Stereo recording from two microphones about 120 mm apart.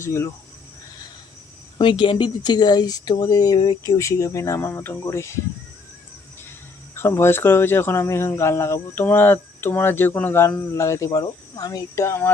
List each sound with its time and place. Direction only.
0.0 s speech: 25° left (ahead or behind)
1.8 s speech: 45° left (ahead or behind); by 5.4 s 25° left (ahead or behind)
6.9 s speech: 20° left (ahead or behind)